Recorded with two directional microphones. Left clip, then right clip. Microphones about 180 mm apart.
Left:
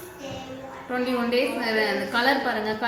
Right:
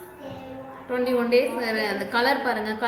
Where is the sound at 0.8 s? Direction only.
40° right (ahead or behind).